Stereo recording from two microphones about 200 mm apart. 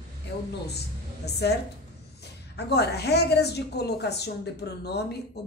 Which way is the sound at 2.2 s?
55° left (ahead or behind).